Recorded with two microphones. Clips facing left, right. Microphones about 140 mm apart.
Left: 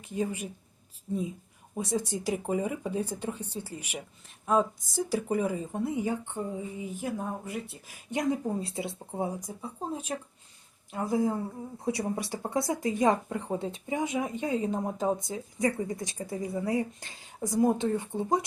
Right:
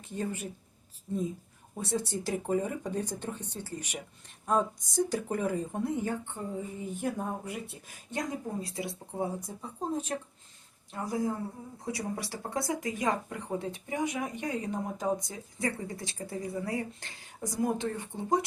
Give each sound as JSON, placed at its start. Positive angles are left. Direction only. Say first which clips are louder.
{"t": 0.1, "sound": "speech", "louder": "left 3 dB", "side_deg": 10}
{"t": 1.7, "sound": "speech", "louder": "left 2 dB", "side_deg": 10}
{"t": 8.1, "sound": "speech", "louder": "left 6 dB", "side_deg": 20}
{"t": 9.6, "sound": "speech", "louder": "right 2 dB", "side_deg": 10}
{"t": 10.9, "sound": "speech", "louder": "left 4 dB", "side_deg": 20}